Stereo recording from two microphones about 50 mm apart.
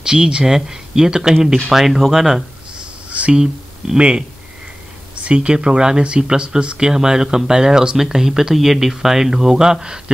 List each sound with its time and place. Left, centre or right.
0.0 s speech: centre
3.1 s a sound: right
3.3 s speech: centre
5.2 s speech: right